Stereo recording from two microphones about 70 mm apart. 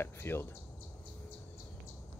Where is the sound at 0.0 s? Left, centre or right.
Left.